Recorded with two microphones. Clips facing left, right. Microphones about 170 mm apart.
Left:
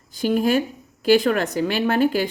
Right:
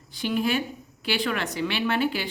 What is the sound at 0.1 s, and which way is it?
A woman's voice, 45° left (ahead or behind).